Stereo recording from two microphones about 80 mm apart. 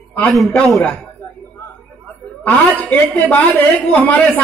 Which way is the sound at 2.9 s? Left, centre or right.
Left.